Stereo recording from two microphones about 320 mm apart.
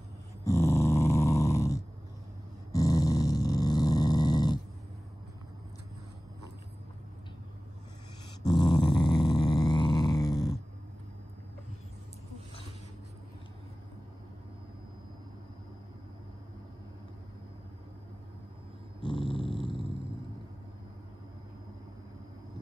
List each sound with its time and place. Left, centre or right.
0.5 s snoring: centre
2.7 s dog: centre
8.5 s a sound: centre
19.0 s dog: centre